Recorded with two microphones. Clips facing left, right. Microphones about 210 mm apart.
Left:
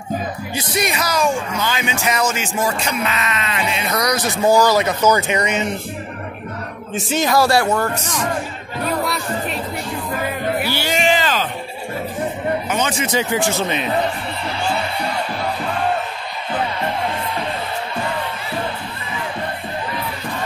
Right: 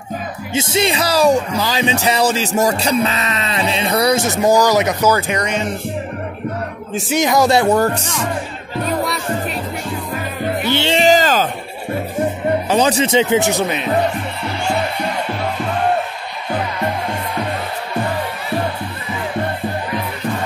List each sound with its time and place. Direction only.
0.5 s speech: 25° right (ahead or behind)
4.6 s speech: 15° right (ahead or behind)
5.1 s speech: 10° left (ahead or behind)
7.1 s speech: 15° right (ahead or behind)
7.7 s speech: 35° right (ahead or behind)
9.0 s music: centre (ahead or behind)
10.7 s music: 25° right (ahead or behind)
11.0 s a sound: 40° right (ahead or behind)
12.6 s speech: 35° right (ahead or behind); by 13.7 s 20° right (ahead or behind)